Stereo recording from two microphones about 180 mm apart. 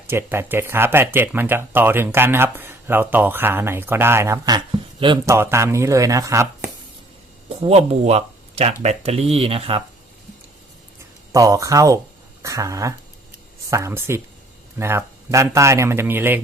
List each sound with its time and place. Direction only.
0.1 s speech: 15° right (ahead or behind)
5.2 s speech: 15° right (ahead or behind)
7.6 s speech: 35° right (ahead or behind)
11.3 s speech: 20° right (ahead or behind)